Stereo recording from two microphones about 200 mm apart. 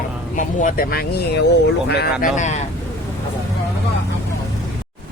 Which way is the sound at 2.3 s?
35° left (ahead or behind).